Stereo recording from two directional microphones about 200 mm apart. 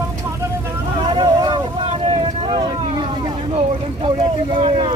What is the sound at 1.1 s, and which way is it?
Vehicle, 25° right (ahead or behind).